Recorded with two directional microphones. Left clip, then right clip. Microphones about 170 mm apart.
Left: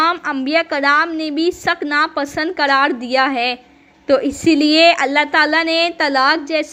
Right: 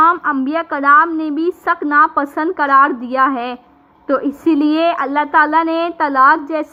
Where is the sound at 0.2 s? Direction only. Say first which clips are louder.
Right 4 dB; 40° left (ahead or behind).